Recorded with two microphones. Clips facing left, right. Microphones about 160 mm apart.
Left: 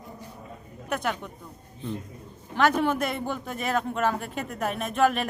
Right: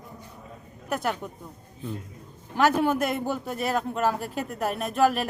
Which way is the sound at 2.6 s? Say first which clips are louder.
Right 1 dB; 5° right (ahead or behind).